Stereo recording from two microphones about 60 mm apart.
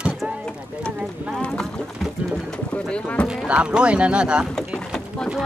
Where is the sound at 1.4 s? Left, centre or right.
Centre.